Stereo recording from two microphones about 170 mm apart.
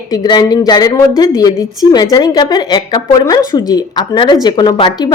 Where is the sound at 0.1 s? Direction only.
25° left (ahead or behind).